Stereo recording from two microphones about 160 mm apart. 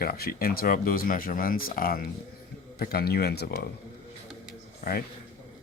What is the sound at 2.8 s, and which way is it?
Speech, 75° left (ahead or behind).